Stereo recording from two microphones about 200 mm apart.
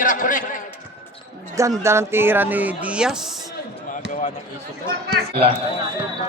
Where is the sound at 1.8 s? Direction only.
15° right (ahead or behind).